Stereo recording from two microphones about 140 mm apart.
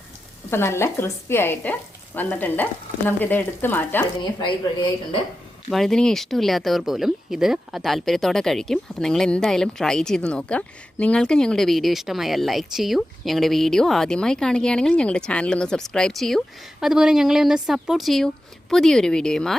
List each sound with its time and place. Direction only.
0.5 s speech: 20° left (ahead or behind)
4.2 s speech: 30° left (ahead or behind)
5.7 s speech: 5° left (ahead or behind)